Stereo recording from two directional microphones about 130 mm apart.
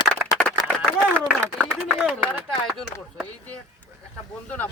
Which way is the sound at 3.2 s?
10° left (ahead or behind).